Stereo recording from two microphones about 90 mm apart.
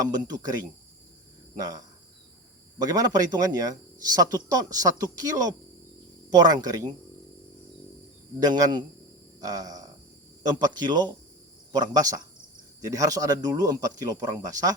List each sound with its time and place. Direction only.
0.0 s speech: 45° right (ahead or behind)
8.4 s speech: 50° right (ahead or behind)